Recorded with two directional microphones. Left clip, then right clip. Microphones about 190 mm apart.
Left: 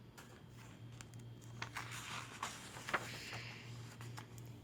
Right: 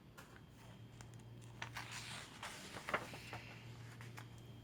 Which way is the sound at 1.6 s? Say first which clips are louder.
Left 2 dB; centre (ahead or behind).